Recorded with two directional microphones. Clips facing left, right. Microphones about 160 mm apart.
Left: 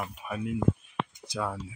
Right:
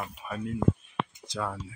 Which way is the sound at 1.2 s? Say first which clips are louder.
Left 3 dB; 10° left (ahead or behind).